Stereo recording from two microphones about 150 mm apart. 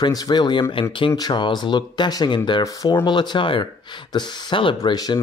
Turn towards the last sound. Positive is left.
turn(degrees=25)  # may be behind; listen again after turning